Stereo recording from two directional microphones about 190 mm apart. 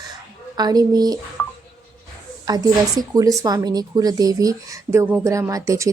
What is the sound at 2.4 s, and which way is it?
A woman's voice, 20° right (ahead or behind).